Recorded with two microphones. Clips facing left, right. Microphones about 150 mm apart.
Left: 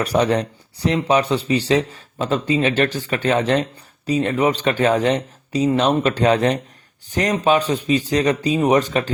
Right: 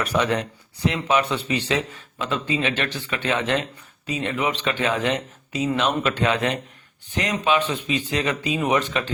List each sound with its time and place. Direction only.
0.0 s a man's voice: 35° left (ahead or behind)